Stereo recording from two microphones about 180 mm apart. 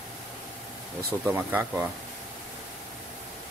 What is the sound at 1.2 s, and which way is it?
Speech, 10° right (ahead or behind).